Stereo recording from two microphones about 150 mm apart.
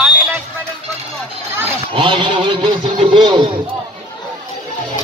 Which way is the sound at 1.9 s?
35° right (ahead or behind).